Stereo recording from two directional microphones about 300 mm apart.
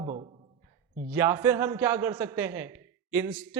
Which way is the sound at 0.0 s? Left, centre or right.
Centre.